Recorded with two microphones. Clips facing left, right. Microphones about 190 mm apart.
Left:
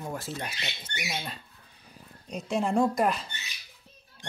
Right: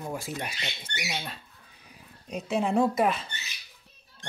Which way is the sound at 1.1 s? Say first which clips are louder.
Even; 5° left (ahead or behind).